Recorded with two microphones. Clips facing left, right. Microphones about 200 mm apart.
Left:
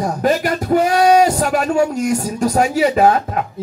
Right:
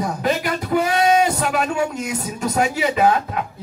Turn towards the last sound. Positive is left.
turn(degrees=45)  # may be behind; listen again after turning